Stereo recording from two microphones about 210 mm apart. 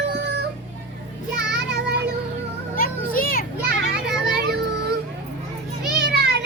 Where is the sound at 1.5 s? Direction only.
50° right (ahead or behind).